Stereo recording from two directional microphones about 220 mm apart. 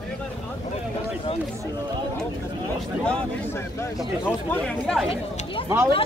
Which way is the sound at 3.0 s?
5° left (ahead or behind).